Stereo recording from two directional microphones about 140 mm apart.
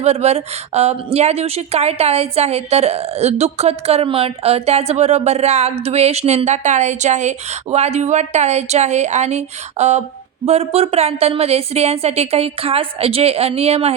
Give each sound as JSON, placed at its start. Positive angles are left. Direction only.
{"t": 0.0, "sound": "speech", "side_deg": -50}